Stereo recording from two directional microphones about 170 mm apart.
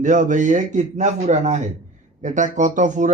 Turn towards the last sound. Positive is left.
turn(degrees=-45)  # may be behind; listen again after turning